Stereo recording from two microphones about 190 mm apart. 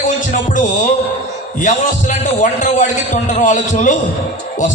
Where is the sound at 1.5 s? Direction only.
45° left (ahead or behind).